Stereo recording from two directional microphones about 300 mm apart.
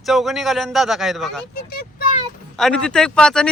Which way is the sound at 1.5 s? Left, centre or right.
Left.